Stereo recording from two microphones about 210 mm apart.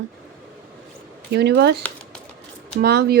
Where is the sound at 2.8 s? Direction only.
50° right (ahead or behind).